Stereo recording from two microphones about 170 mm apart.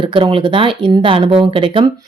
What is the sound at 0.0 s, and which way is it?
A woman's voice, 30° right (ahead or behind).